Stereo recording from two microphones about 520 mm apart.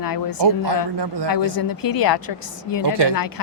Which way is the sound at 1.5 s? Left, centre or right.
Left.